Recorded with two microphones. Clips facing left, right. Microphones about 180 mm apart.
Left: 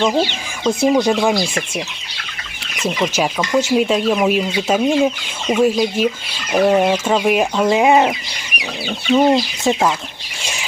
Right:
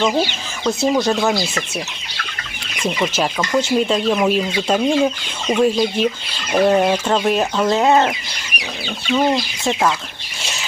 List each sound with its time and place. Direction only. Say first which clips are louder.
0.6 s speech: left 3 dB; 15° left (ahead or behind)
2.7 s speech: left 1 dB; 5° left (ahead or behind)
9.1 s speech: left 4 dB; 20° left (ahead or behind)
10.4 s a sound: left 1 dB; 15° left (ahead or behind)